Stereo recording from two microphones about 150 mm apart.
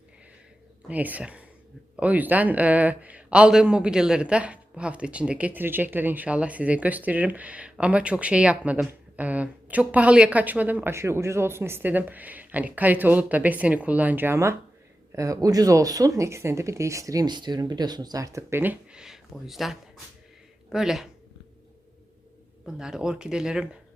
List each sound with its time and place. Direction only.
0.9 s a man's voice: 10° right (ahead or behind)
22.6 s speech: 5° right (ahead or behind)